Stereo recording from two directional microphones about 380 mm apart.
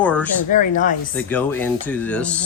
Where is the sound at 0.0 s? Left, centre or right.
Centre.